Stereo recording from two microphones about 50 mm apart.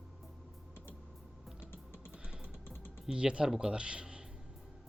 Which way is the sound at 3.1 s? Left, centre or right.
Centre.